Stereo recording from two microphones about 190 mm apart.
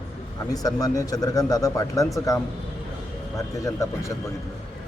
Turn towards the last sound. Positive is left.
turn(degrees=15)  # may be behind; listen again after turning